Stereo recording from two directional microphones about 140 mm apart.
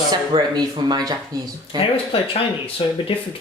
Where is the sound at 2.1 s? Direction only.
40° left (ahead or behind).